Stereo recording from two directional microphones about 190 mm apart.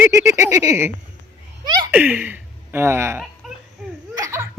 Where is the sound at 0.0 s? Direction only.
15° right (ahead or behind).